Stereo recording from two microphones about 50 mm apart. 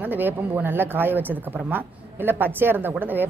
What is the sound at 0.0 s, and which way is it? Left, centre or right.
A woman's voice, right.